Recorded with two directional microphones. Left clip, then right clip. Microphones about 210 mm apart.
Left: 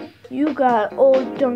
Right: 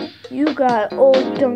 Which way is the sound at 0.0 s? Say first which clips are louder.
Right 2 dB; 45° right (ahead or behind).